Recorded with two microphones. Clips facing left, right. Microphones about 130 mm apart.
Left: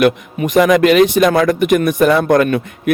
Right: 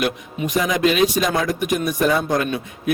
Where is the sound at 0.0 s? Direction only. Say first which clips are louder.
Left 9 dB; 65° left (ahead or behind).